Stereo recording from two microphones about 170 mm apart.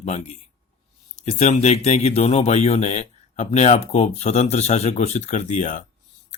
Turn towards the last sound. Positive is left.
turn(degrees=45)  # may be behind; listen again after turning